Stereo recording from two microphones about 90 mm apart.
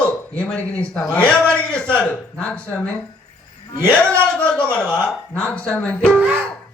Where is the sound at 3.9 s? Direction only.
10° left (ahead or behind).